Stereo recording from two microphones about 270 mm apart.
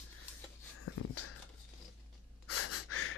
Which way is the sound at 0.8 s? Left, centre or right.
Left.